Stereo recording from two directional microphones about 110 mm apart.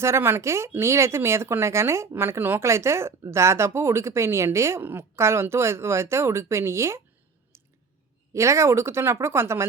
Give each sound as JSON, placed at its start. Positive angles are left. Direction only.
{"t": 0.0, "sound": "speech", "side_deg": -25}
{"t": 7.5, "sound": "clicking", "side_deg": -25}
{"t": 8.3, "sound": "speech", "side_deg": -25}